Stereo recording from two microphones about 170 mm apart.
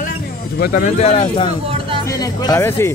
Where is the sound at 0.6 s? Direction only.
60° left (ahead or behind).